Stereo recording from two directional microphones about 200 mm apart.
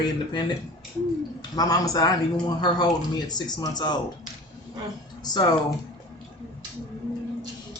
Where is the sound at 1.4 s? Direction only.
20° left (ahead or behind).